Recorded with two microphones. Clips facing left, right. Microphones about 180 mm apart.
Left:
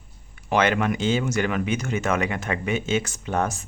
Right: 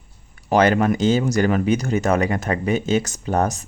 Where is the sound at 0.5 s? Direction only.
40° right (ahead or behind).